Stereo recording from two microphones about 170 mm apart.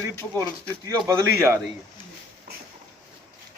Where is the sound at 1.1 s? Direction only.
15° right (ahead or behind).